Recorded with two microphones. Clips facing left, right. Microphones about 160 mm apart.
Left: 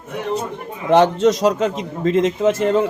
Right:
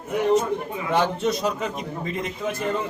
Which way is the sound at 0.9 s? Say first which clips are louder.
Left 9 dB; 85° left.